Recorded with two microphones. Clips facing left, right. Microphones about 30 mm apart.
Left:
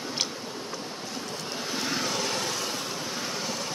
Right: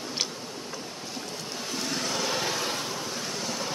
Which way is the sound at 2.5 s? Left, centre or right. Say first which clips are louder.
Right 2 dB; centre.